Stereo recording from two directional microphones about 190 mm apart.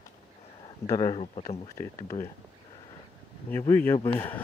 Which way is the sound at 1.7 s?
15° left (ahead or behind).